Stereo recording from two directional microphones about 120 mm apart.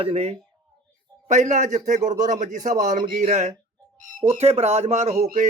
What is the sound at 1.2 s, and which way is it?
A man's voice, 85° right.